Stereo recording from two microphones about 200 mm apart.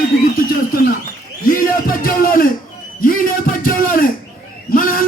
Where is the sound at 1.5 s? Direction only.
45° left (ahead or behind).